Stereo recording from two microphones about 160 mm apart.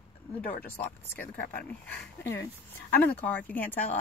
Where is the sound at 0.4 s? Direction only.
65° left (ahead or behind).